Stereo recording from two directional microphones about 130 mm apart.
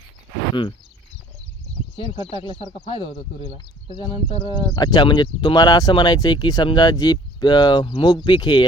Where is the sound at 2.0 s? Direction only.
45° left (ahead or behind).